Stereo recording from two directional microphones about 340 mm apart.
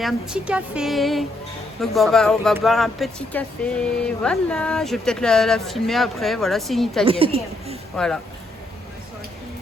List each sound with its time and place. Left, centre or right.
0.0 s speech: centre
7.0 s a woman's voice: centre
7.9 s speech: centre